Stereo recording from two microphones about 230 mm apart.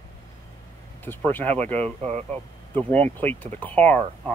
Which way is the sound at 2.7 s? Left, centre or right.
Centre.